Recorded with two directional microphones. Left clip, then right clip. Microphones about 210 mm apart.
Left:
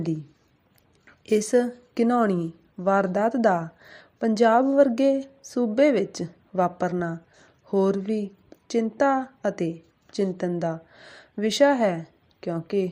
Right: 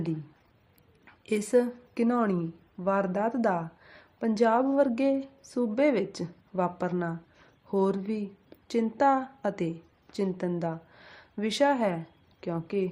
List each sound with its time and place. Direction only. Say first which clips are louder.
1.2 s a woman's voice: left 4 dB; 15° left (ahead or behind)